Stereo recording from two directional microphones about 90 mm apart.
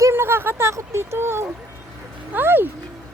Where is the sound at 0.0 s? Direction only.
25° right (ahead or behind).